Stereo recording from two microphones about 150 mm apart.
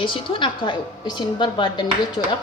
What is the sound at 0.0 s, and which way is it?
A woman's voice, 35° left (ahead or behind).